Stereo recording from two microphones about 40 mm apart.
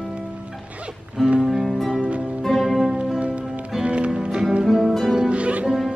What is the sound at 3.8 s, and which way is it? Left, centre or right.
Music, right.